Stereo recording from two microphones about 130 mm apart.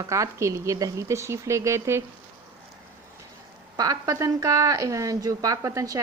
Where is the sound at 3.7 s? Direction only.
30° right (ahead or behind).